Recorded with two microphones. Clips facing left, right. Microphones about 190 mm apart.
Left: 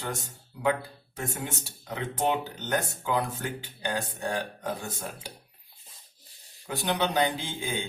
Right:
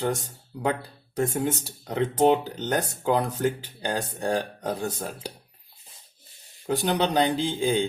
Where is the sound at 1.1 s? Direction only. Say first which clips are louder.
Right 9 dB; 35° right (ahead or behind).